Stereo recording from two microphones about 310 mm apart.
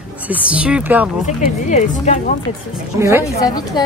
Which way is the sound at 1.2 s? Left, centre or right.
Left.